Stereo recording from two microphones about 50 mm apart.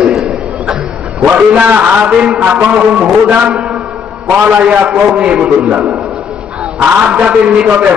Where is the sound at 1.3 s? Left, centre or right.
Right.